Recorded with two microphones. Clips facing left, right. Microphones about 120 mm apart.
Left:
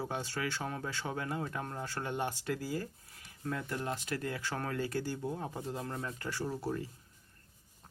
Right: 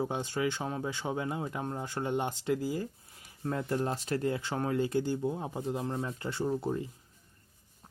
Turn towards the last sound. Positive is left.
turn(degrees=-20)  # may be behind; listen again after turning